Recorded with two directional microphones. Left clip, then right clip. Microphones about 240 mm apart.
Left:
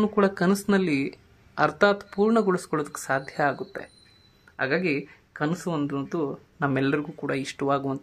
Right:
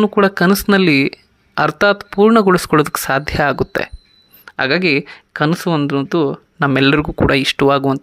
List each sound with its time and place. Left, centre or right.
0.0 s speech: right